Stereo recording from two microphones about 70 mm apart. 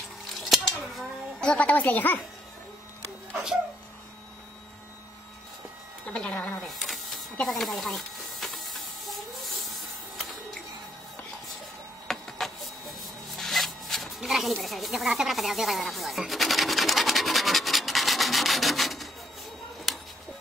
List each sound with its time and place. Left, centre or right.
0.3 s scissors: centre
1.4 s speech: centre
6.0 s speech: centre
6.7 s a sound: centre
7.4 s hiss: centre
12.1 s printer: centre
13.4 s zipper: centre